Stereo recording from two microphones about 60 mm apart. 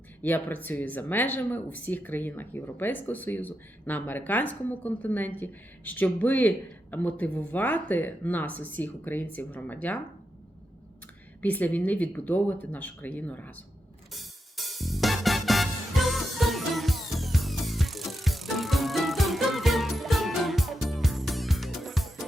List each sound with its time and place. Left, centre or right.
0.2 s speech: left
11.4 s speech: left
14.1 s music: centre